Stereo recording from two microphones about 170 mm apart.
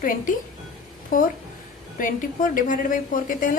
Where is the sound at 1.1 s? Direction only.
55° left (ahead or behind).